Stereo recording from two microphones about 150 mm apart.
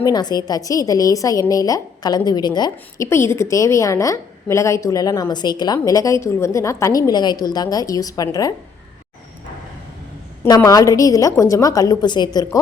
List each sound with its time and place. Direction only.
0.0 s a woman's voice: 25° left (ahead or behind)
3.1 s a woman's voice: 15° left (ahead or behind)
10.4 s a woman's voice: 25° left (ahead or behind)